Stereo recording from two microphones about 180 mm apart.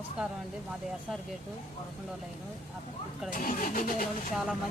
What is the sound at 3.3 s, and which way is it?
Speech, 50° left (ahead or behind).